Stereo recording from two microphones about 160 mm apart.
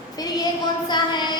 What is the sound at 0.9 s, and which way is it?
Speech, 25° left (ahead or behind).